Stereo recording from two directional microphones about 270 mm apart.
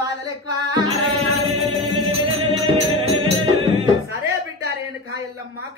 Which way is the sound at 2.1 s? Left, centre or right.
Centre.